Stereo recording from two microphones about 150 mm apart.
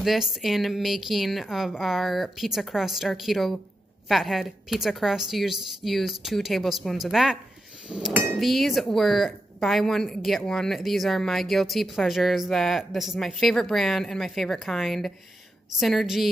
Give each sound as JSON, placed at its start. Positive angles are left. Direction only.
{"t": 0.0, "sound": "a woman's voice", "side_deg": 0}
{"t": 7.9, "sound": "cutlery", "side_deg": -5}
{"t": 8.4, "sound": "a woman's voice", "side_deg": 0}